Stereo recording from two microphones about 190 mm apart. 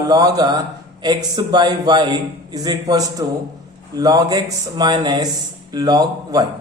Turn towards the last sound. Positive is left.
turn(degrees=-20)  # may be behind; listen again after turning